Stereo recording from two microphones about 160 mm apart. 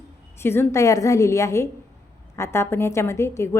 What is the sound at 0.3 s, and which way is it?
A woman's voice, 15° left (ahead or behind).